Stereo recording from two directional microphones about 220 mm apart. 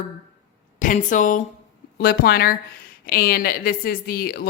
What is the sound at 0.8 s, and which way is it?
A woman's voice, 35° left (ahead or behind).